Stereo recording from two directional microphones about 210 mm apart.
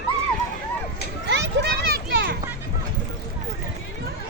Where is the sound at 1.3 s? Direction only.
55° right (ahead or behind).